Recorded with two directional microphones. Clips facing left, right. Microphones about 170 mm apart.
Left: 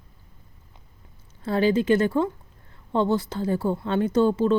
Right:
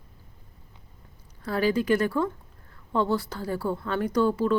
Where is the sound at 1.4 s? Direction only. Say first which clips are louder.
Left 3 dB; 25° left (ahead or behind).